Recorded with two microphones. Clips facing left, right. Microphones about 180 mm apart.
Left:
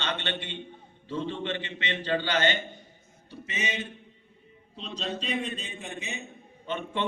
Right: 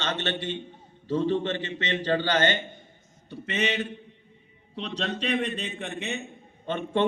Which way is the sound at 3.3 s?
60° right (ahead or behind).